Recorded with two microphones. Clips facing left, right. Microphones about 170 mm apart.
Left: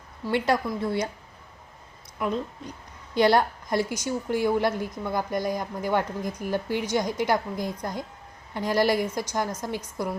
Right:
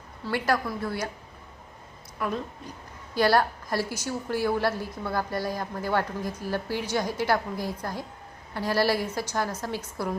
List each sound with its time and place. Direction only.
0.3 s a woman's voice: 20° left (ahead or behind)
2.1 s a woman's voice: 20° left (ahead or behind)